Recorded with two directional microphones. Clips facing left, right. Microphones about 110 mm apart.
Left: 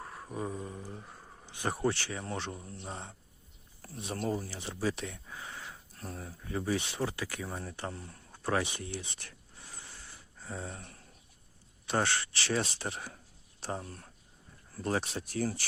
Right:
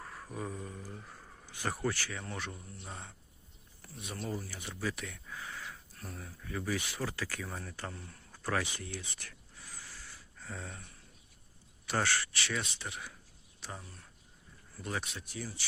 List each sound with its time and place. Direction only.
0.0 s speech: 20° left (ahead or behind)
11.9 s speech: 25° left (ahead or behind)
15.3 s speech: 50° left (ahead or behind)